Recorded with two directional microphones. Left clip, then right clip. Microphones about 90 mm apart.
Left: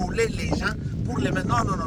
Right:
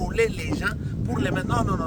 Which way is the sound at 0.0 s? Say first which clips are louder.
Right 1 dB; 40° right (ahead or behind).